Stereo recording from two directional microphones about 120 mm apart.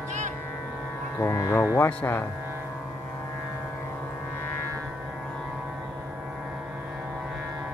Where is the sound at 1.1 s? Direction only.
25° left (ahead or behind).